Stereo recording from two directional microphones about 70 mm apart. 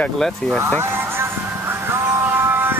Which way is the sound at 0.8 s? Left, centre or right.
Right.